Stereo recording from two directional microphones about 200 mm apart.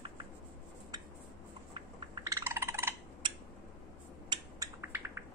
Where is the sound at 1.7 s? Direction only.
25° right (ahead or behind).